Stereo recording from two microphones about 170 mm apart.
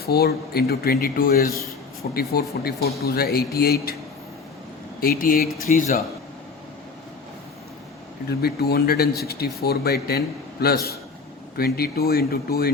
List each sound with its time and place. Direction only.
0.0 s speech: 65° left (ahead or behind)
4.9 s speech: 60° left (ahead or behind)
5.7 s a man's voice: 45° left (ahead or behind)
8.4 s speech: 65° left (ahead or behind)